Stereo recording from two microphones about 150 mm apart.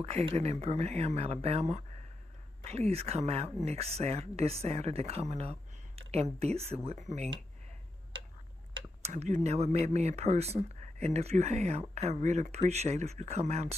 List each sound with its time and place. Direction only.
0.0 s speech: 40° right (ahead or behind)
9.0 s speech: 50° right (ahead or behind)